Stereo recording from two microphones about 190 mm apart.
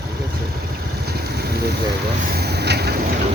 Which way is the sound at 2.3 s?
60° right (ahead or behind).